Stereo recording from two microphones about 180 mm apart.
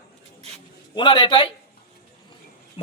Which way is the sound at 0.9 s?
25° left (ahead or behind).